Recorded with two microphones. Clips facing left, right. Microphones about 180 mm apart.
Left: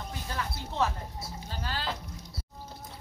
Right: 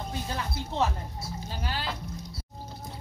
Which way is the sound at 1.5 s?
15° right (ahead or behind).